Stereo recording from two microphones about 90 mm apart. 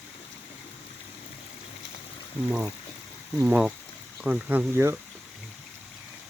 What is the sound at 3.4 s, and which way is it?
Speech, 10° right (ahead or behind).